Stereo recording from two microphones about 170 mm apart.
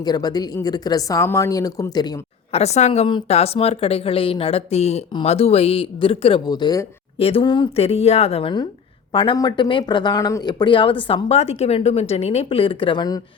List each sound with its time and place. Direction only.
0.0 s speech: 25° left (ahead or behind)
2.5 s speech: 40° left (ahead or behind); by 13.2 s 25° left (ahead or behind)